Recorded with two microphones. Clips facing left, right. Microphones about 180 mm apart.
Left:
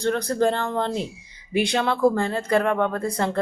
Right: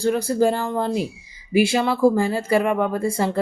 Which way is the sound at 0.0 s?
5° right (ahead or behind).